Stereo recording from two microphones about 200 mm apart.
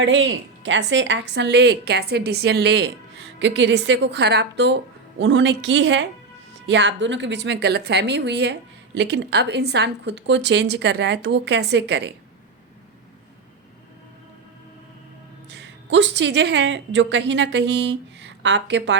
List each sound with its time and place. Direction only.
0.0 s speech: 70° right (ahead or behind)
15.4 s speech: 60° right (ahead or behind)